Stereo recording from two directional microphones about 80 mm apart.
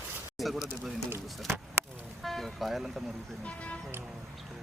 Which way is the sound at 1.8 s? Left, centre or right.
Right.